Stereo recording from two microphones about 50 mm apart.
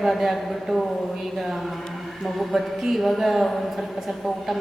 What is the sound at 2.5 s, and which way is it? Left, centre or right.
A man's voice, centre.